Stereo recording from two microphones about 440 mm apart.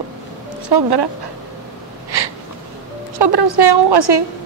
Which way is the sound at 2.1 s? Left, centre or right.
Right.